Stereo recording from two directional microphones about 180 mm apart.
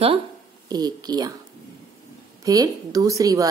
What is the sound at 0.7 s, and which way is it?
Speech, 20° right (ahead or behind).